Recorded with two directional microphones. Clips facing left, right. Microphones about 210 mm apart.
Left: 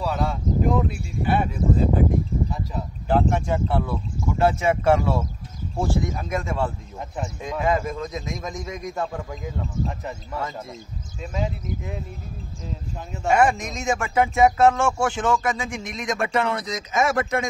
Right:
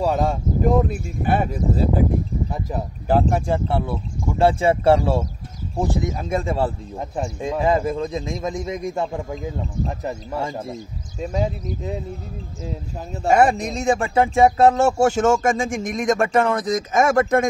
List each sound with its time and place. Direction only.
0.0 s speech: 45° right (ahead or behind)
3.1 s speech: 35° right (ahead or behind)
5.8 s speech: 20° right (ahead or behind); by 11.9 s 35° right (ahead or behind)
13.2 s speech: 35° right (ahead or behind)